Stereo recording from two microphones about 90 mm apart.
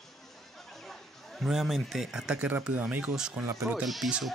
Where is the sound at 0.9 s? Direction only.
Centre (ahead or behind).